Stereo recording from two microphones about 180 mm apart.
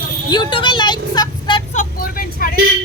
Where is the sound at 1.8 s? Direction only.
50° left (ahead or behind).